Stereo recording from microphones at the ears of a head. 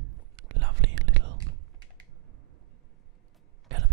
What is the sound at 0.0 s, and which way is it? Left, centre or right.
Whispering, right.